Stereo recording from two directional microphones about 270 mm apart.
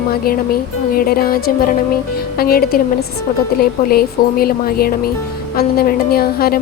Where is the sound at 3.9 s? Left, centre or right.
Left.